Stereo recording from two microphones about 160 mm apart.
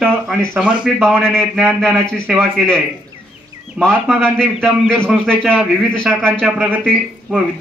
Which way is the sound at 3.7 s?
Centre (ahead or behind).